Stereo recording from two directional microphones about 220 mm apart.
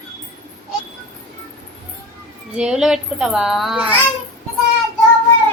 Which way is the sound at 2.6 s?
5° right (ahead or behind).